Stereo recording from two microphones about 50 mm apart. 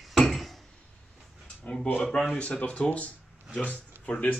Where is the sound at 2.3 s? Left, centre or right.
Left.